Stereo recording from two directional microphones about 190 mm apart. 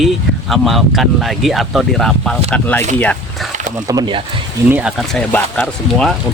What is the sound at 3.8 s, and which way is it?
Speech, 20° right (ahead or behind).